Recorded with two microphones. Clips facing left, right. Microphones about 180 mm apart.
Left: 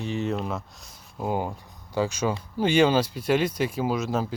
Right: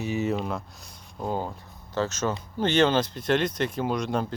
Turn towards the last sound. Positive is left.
turn(degrees=5)  # may be behind; listen again after turning